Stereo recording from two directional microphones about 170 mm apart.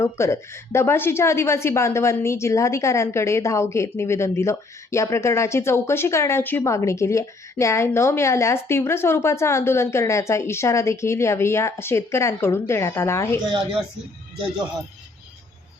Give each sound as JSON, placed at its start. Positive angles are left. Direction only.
{"t": 0.0, "sound": "a woman's voice", "side_deg": 15}